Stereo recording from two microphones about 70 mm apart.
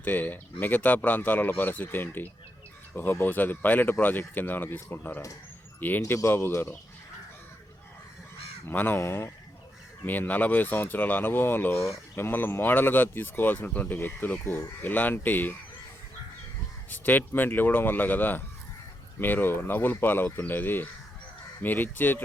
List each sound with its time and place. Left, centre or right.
0.0 s speech: left
8.7 s speech: left
9.0 s speech: left
10.0 s speech: left
16.9 s speech: left